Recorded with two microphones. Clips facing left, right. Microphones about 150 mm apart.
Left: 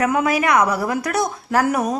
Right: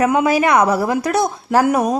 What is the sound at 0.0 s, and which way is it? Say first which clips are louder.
A woman's voice: right 4 dB; 25° right (ahead or behind).